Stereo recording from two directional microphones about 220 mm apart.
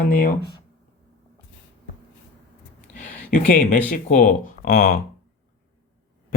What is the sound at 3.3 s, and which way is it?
Speech, 40° left (ahead or behind).